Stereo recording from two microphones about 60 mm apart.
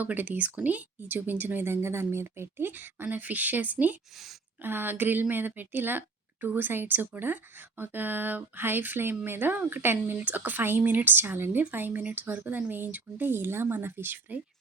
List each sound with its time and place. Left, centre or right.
0.0 s speech: right
4.1 s a woman's voice: centre
4.6 s speech: right